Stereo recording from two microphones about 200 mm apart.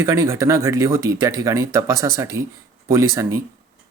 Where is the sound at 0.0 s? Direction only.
15° right (ahead or behind).